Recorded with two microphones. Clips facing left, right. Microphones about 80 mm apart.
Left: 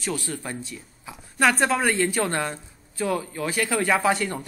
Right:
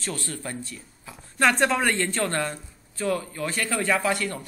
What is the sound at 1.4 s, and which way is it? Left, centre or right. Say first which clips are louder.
A woman's voice: left 1 dB; centre.